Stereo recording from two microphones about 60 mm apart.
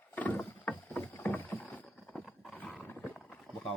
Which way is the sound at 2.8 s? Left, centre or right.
Left.